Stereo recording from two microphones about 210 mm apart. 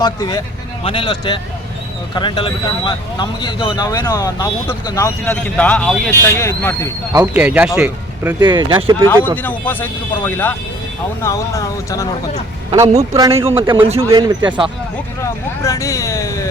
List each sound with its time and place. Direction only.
0.0 s speech: 20° left (ahead or behind)
7.1 s speech: 10° right (ahead or behind)
8.4 s speech: 20° right (ahead or behind)
9.0 s speech: 10° left (ahead or behind)
12.7 s speech: 15° right (ahead or behind)
15.2 s speech: 15° left (ahead or behind)